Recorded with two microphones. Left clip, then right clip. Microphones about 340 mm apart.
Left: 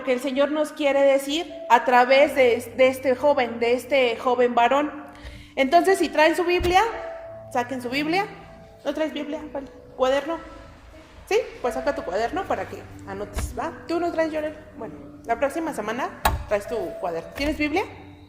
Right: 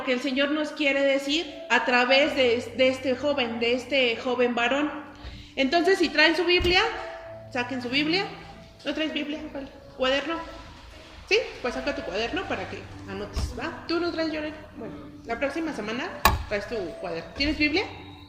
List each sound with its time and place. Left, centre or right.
0.0 s a woman's voice: centre
11.9 s a woman's voice: centre